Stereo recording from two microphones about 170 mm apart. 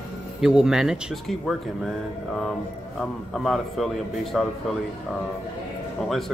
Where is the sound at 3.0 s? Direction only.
Centre (ahead or behind).